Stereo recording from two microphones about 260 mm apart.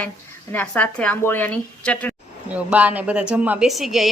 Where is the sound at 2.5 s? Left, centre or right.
Centre.